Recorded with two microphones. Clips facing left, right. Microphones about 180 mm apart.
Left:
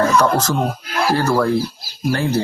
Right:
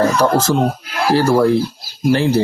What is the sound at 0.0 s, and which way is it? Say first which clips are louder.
Speech: right 1 dB; 30° right (ahead or behind).